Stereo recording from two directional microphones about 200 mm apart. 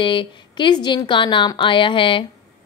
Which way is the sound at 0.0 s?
25° left (ahead or behind).